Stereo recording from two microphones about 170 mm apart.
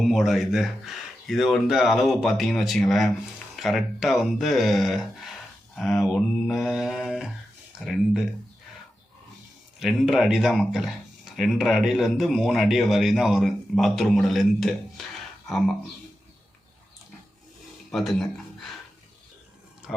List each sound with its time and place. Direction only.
0.0 s speech: centre (ahead or behind)
9.8 s speech: centre (ahead or behind)
17.9 s speech: centre (ahead or behind)